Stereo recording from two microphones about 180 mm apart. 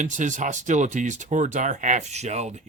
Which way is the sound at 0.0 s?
45° right (ahead or behind).